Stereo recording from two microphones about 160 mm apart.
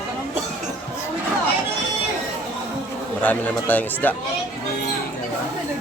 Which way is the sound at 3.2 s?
10° left (ahead or behind).